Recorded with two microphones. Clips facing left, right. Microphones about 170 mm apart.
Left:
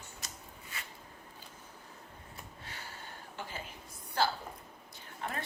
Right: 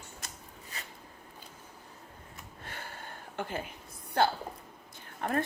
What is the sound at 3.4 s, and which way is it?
A woman's voice, 55° right (ahead or behind).